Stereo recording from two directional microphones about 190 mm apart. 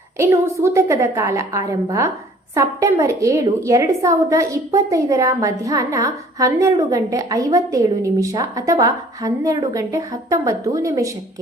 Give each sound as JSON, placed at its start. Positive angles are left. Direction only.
{"t": 0.2, "sound": "a woman's voice", "side_deg": -15}